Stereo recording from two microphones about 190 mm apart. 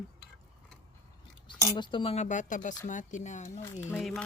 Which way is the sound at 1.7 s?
25° left (ahead or behind).